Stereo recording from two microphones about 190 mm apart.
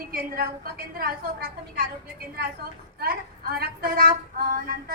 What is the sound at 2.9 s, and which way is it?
Speech, 55° right (ahead or behind).